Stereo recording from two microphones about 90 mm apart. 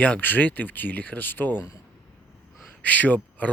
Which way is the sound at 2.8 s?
15° left (ahead or behind).